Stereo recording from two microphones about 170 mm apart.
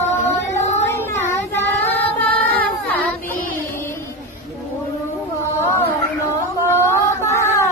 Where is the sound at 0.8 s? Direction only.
15° left (ahead or behind).